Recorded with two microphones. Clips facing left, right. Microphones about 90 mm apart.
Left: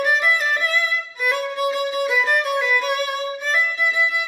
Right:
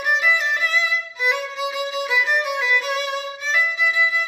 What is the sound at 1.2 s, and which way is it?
Violin, 15° right (ahead or behind).